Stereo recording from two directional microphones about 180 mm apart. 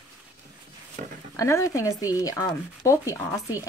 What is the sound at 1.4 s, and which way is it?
Speech, 15° left (ahead or behind).